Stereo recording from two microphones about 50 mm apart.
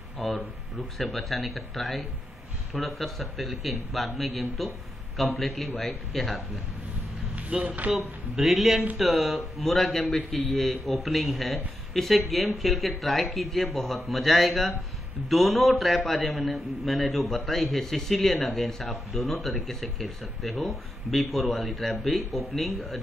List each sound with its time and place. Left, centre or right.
0.2 s a man's voice: centre
7.3 s speech: right
7.9 s a man's voice: centre